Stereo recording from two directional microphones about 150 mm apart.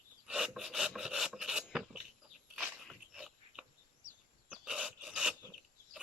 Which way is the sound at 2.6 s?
5° right (ahead or behind).